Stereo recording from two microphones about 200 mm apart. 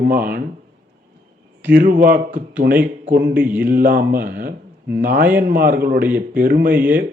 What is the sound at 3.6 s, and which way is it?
Speech, 45° right (ahead or behind).